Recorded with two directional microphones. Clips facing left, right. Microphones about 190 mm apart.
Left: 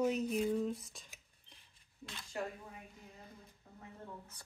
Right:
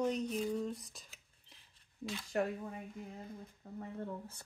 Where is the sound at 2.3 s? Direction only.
60° right (ahead or behind).